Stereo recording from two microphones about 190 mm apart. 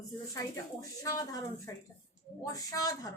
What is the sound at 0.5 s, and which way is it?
Speech, 15° left (ahead or behind).